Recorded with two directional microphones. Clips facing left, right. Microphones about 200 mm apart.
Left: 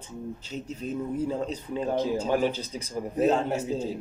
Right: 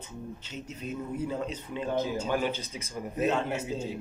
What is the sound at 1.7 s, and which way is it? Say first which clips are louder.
A man's voice: left 4 dB; 35° left (ahead or behind).